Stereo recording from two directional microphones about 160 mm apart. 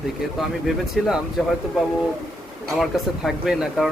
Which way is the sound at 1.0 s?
Centre (ahead or behind).